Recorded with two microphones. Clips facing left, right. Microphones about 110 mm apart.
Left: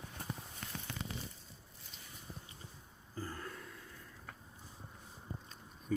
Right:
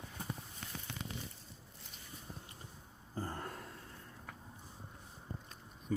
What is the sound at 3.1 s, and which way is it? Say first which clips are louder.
Gasp: right 2 dB; 30° right (ahead or behind).